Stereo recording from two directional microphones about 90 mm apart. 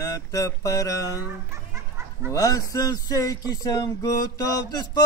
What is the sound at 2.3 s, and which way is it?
Speech, 40° left (ahead or behind).